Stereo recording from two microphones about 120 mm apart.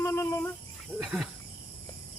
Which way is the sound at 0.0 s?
25° left (ahead or behind).